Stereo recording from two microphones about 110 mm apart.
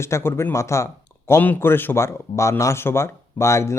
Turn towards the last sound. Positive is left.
turn(degrees=25)  # may be behind; listen again after turning